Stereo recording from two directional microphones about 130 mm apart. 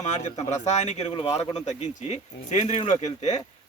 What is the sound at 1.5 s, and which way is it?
Speech, 65° left (ahead or behind).